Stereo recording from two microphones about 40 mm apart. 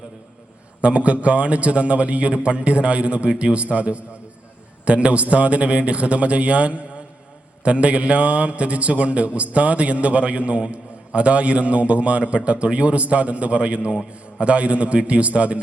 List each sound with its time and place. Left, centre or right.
0.8 s a man's voice: right